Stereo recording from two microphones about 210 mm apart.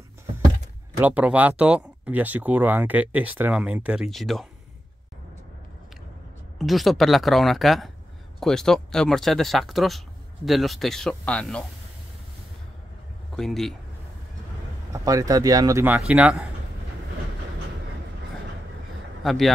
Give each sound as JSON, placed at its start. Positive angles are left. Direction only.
{"t": 0.9, "sound": "speech", "side_deg": -10}
{"t": 6.6, "sound": "speech", "side_deg": 0}
{"t": 13.4, "sound": "speech", "side_deg": 0}
{"t": 14.9, "sound": "speech", "side_deg": -15}
{"t": 19.2, "sound": "a man's voice", "side_deg": 0}